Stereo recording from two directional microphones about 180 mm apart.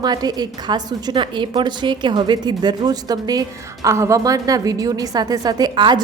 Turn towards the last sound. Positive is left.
turn(degrees=-25)  # may be behind; listen again after turning